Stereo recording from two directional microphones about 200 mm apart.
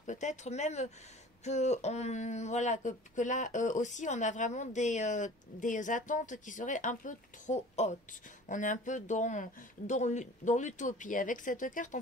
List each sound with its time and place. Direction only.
0.0 s speech: 35° left (ahead or behind)